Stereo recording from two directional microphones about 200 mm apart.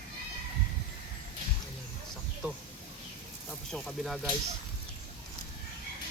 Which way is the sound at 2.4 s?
10° right (ahead or behind).